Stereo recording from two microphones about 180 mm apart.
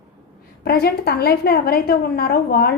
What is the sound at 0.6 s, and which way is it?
A woman's voice, 60° left (ahead or behind).